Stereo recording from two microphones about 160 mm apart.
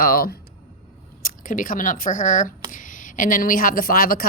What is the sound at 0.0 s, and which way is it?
A woman's voice, 65° left (ahead or behind).